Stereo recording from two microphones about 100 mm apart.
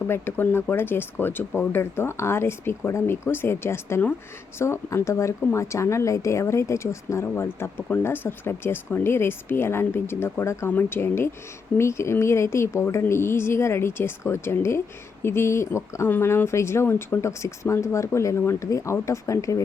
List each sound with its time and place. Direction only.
0.1 s speech: 25° left (ahead or behind)